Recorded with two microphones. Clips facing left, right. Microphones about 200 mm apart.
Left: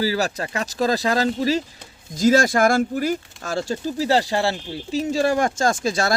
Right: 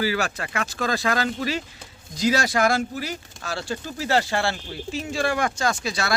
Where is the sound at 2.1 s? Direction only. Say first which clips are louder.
Left 5 dB; 50° left (ahead or behind).